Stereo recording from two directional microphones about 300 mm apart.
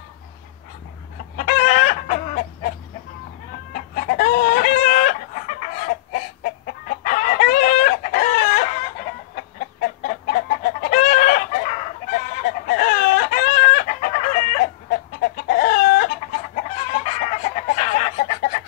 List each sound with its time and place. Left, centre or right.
1.3 s chicken: left
3.7 s chicken: left
9.8 s chicken: left